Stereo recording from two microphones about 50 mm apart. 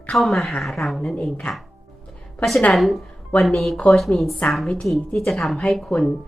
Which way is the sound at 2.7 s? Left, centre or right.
Centre.